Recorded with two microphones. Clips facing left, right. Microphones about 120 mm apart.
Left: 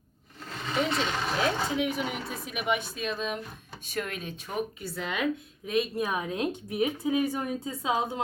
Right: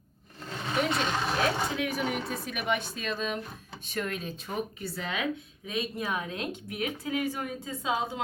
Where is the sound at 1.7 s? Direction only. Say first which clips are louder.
Left 2 dB; 20° left (ahead or behind).